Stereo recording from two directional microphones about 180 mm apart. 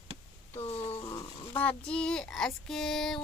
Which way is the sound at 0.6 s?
35° left (ahead or behind).